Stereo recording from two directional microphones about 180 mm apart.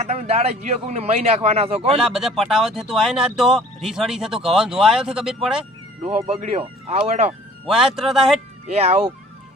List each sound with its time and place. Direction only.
0.0 s a man's voice: 35° right (ahead or behind)
2.0 s speech: centre (ahead or behind)
6.2 s a man's voice: 35° right (ahead or behind)
7.7 s speech: centre (ahead or behind)
8.7 s a man's voice: 35° right (ahead or behind)